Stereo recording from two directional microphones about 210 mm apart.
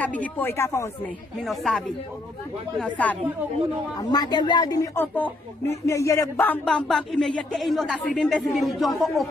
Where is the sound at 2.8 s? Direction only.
5° left (ahead or behind).